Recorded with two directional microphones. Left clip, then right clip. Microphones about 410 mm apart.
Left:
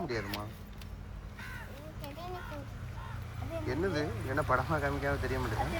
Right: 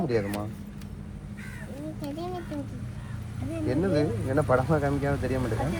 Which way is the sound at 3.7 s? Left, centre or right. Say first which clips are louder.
Right 8 dB; centre.